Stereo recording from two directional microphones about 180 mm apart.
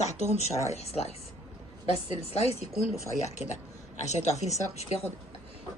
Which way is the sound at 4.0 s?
40° left (ahead or behind).